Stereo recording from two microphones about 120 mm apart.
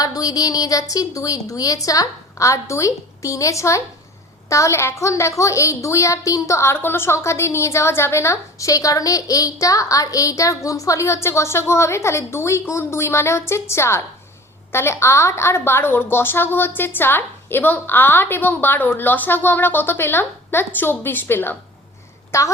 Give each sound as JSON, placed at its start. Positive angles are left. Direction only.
{"t": 0.0, "sound": "a woman's voice", "side_deg": 30}